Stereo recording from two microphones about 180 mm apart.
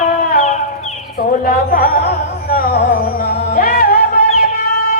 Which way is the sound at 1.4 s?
55° left (ahead or behind).